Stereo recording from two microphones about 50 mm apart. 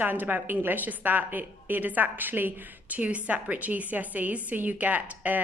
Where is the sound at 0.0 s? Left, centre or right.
Right.